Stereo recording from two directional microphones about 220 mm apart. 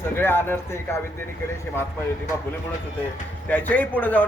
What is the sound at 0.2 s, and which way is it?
Speech, 10° left (ahead or behind).